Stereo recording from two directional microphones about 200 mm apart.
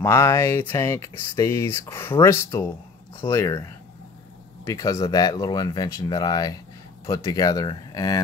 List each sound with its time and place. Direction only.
0.0 s speech: 15° left (ahead or behind)
4.6 s speech: 15° left (ahead or behind)